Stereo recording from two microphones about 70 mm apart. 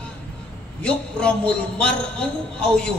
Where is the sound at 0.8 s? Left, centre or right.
Centre.